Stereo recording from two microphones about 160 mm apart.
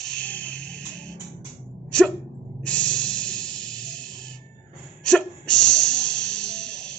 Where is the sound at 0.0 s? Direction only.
5° left (ahead or behind).